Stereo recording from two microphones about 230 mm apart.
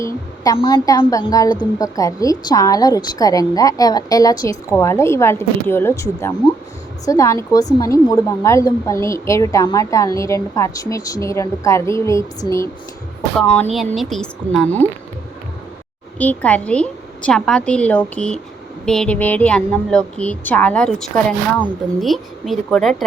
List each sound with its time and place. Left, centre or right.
0.0 s a woman's voice: centre
13.3 s a woman's voice: centre
16.1 s a woman's voice: centre